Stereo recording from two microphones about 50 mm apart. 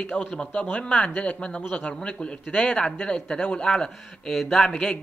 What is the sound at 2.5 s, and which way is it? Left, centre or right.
Speech, left.